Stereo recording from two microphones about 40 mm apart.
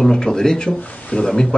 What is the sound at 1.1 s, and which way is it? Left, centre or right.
Speech, left.